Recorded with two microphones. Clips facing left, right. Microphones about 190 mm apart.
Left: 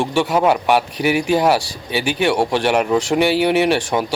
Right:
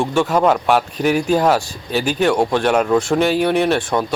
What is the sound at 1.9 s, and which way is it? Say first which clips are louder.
Speech: right 1 dB; 65° left (ahead or behind).